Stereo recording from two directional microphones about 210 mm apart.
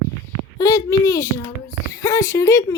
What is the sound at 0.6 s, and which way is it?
A child's voice, 15° left (ahead or behind).